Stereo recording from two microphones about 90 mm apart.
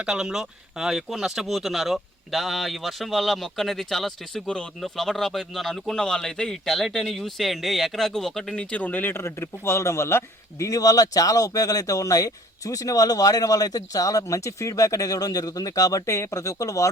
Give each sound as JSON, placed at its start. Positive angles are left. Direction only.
{"t": 0.0, "sound": "speech", "side_deg": -5}